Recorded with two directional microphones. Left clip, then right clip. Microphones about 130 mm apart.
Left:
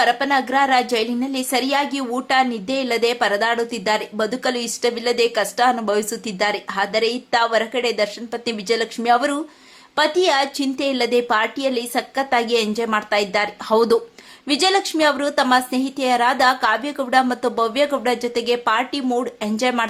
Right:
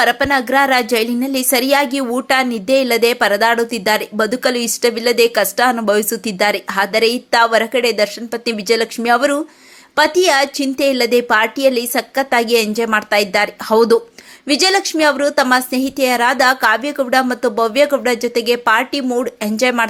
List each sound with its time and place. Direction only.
0.0 s a woman's voice: 30° right (ahead or behind)